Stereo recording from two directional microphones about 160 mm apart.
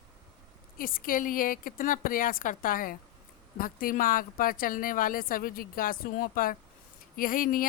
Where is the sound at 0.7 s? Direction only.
60° left (ahead or behind).